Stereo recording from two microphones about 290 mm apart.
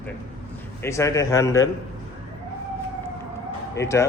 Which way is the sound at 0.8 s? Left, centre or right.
Centre.